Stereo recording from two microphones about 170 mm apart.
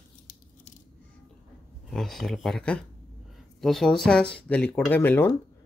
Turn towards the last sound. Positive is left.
turn(degrees=10)  # may be behind; listen again after turning